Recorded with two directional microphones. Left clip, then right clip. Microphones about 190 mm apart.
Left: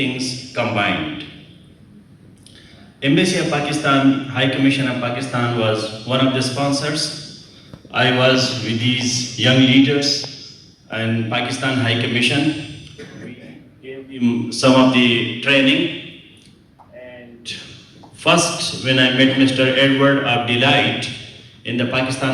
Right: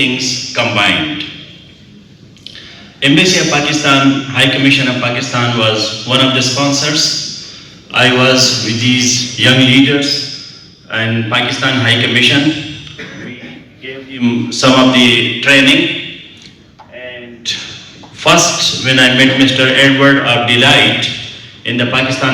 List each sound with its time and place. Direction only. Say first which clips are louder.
0.0 s a man's voice: right 9 dB; 55° left (ahead or behind)
3.0 s a man's voice: right 8 dB; 55° left (ahead or behind)
10.8 s a man's voice: right 7 dB; 55° left (ahead or behind)
14.2 s a man's voice: right 5 dB; 50° left (ahead or behind)
18.2 s a man's voice: right 7 dB; 45° left (ahead or behind)